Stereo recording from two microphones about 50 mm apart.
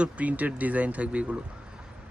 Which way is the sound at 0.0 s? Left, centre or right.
Right.